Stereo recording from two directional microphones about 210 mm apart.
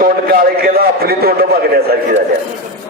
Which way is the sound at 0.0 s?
45° right (ahead or behind).